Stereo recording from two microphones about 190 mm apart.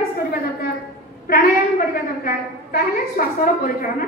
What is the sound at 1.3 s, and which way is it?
A woman's voice, 50° left (ahead or behind).